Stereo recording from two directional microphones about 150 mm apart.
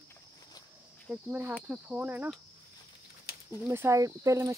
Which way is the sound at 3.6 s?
20° right (ahead or behind).